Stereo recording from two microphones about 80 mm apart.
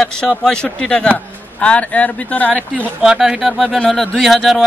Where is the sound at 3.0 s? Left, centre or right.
Centre.